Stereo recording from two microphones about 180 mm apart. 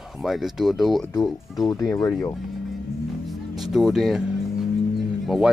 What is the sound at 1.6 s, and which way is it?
Speech, 20° left (ahead or behind).